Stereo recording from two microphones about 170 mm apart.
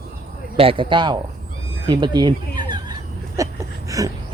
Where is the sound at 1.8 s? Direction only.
25° right (ahead or behind).